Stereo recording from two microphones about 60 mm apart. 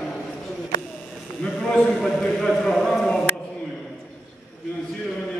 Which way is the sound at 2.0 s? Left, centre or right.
Centre.